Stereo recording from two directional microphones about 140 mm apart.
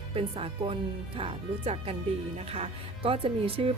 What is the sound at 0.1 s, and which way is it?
Speech, 45° right (ahead or behind).